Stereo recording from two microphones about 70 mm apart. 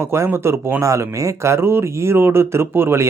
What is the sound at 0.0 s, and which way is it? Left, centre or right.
Speech, right.